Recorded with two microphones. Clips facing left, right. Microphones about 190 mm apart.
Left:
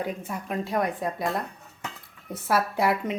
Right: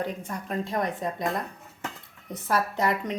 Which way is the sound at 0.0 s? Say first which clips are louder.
Left 1 dB; 10° left (ahead or behind).